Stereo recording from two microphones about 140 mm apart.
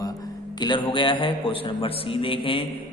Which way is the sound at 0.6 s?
35° left (ahead or behind).